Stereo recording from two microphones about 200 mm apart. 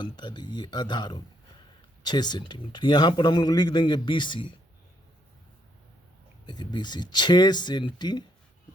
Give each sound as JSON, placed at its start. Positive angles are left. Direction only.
{"t": 0.0, "sound": "a man's voice", "side_deg": 20}
{"t": 6.4, "sound": "a man's voice", "side_deg": 20}